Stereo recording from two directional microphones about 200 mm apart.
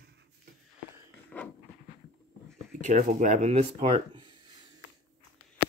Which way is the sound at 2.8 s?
35° right (ahead or behind).